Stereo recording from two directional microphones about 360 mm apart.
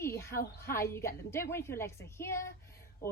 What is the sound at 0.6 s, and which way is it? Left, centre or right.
A woman's voice, centre.